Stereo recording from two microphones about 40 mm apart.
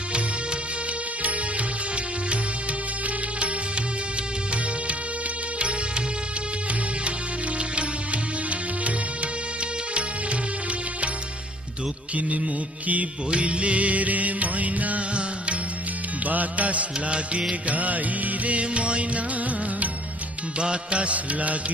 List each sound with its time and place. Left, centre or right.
7.1 s music: right
12.2 s music: right
16.3 s music: right
20.5 s music: right